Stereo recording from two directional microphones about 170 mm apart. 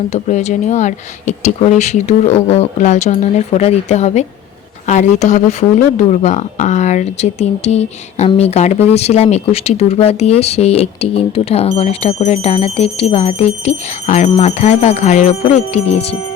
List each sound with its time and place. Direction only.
0.1 s speech: 40° left (ahead or behind)